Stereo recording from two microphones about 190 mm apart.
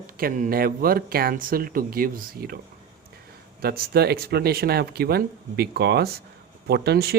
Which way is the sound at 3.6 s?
55° right (ahead or behind).